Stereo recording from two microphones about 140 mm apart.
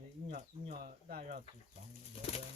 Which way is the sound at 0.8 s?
90° right.